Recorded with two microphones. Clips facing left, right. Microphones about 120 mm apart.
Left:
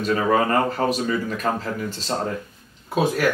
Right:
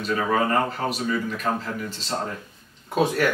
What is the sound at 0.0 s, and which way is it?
Speech, 45° left (ahead or behind).